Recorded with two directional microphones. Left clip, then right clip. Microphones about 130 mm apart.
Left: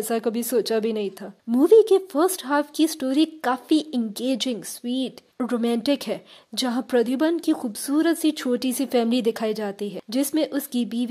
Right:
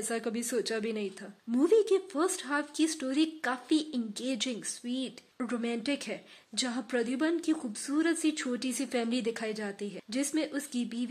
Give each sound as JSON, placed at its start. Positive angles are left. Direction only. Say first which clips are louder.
{"t": 0.1, "sound": "speech", "louder": "left 10 dB", "side_deg": 50}
{"t": 5.6, "sound": "a woman's voice", "louder": "left 11 dB", "side_deg": 70}